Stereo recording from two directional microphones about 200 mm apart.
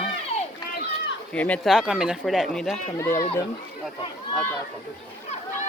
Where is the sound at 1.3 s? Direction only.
5° left (ahead or behind).